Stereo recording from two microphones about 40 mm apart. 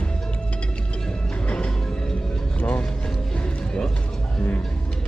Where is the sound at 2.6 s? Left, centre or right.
Left.